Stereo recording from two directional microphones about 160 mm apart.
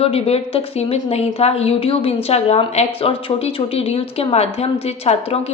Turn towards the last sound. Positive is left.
turn(degrees=40)  # may be behind; listen again after turning